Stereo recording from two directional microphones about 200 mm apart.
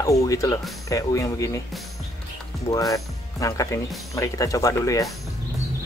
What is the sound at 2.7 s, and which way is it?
Speech, 15° left (ahead or behind).